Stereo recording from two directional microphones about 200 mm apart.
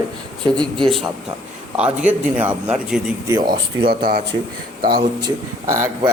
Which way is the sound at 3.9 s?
50° right (ahead or behind).